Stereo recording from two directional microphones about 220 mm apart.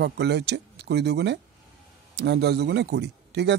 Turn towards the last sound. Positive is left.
turn(degrees=-50)  # may be behind; listen again after turning